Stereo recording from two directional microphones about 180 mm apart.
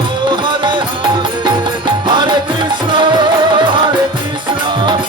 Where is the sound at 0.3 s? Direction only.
25° right (ahead or behind).